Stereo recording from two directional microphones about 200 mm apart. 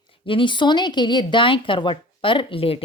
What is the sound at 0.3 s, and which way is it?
A woman's voice, 25° left (ahead or behind).